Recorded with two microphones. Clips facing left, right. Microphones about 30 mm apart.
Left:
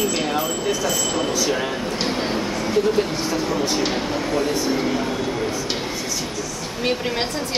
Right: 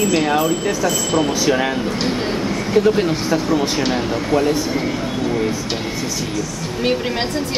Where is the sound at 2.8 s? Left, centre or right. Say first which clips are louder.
Right 4 dB; centre.